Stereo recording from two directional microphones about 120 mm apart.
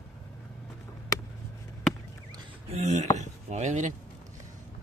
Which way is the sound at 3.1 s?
85° right.